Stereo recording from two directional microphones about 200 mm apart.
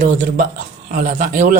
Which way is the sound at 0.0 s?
40° right (ahead or behind).